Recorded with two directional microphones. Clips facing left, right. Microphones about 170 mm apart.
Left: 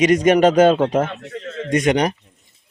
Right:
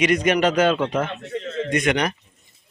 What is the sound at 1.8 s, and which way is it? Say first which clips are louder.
Speech: left 6 dB; 40° left (ahead or behind).